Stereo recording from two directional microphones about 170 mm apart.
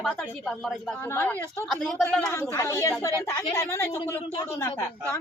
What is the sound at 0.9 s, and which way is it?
Speech, 15° left (ahead or behind).